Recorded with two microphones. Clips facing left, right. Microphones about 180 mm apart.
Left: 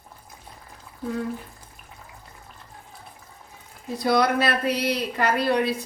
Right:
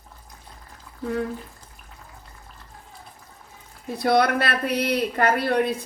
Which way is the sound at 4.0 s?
60° right (ahead or behind).